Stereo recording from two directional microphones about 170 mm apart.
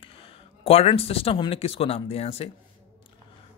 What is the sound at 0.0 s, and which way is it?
Speech, 35° left (ahead or behind).